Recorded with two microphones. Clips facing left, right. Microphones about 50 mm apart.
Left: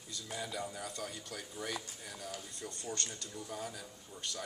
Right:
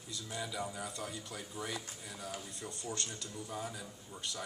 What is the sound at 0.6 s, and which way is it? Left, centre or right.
Speech, centre.